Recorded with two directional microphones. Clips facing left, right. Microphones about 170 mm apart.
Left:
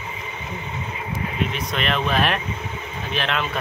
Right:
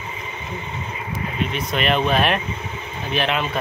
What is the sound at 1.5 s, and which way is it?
Speech, 5° right (ahead or behind).